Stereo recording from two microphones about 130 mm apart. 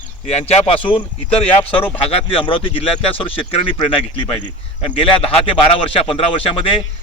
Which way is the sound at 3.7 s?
40° left (ahead or behind).